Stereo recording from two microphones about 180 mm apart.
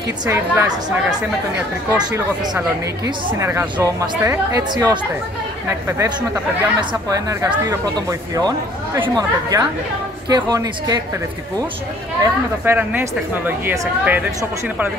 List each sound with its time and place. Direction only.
0.3 s speech: 15° right (ahead or behind)
1.9 s speech: 15° right (ahead or behind)
3.3 s a woman's voice: 15° right (ahead or behind)
12.6 s speech: 10° right (ahead or behind)